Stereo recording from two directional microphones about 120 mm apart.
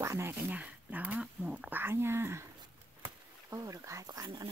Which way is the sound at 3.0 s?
30° right (ahead or behind).